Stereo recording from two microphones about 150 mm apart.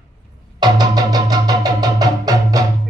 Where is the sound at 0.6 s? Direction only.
25° right (ahead or behind).